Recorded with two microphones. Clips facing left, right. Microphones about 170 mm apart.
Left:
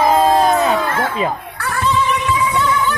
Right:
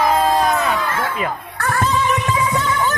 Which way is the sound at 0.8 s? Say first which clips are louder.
Left 3 dB; 55° left (ahead or behind).